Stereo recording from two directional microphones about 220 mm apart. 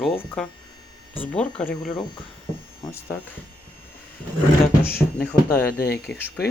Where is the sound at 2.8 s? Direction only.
15° left (ahead or behind).